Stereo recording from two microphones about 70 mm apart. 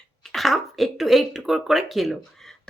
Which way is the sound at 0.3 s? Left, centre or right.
Centre.